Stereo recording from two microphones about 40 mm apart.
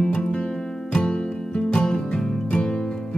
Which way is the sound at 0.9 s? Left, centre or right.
Left.